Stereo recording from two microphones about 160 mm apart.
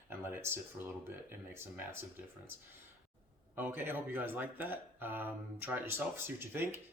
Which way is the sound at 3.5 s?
15° right (ahead or behind).